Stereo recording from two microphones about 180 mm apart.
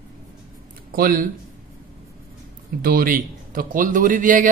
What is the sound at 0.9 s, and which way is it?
Speech, 55° right (ahead or behind).